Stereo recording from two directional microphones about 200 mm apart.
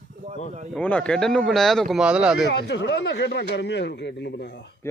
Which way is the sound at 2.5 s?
60° left (ahead or behind).